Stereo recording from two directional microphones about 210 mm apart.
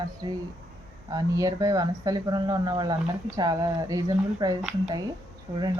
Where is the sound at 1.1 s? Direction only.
15° right (ahead or behind).